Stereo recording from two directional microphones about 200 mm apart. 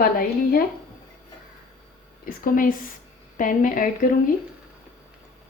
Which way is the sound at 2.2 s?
45° left (ahead or behind).